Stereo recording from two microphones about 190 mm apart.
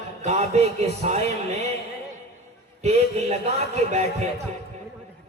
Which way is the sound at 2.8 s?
35° right (ahead or behind).